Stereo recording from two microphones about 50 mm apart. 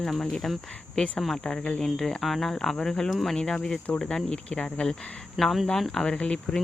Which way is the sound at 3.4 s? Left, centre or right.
Centre.